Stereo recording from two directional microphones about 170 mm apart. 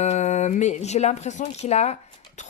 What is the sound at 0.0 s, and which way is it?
Speech, 40° left (ahead or behind).